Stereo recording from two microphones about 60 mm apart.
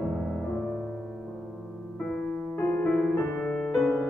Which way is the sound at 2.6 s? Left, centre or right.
Left.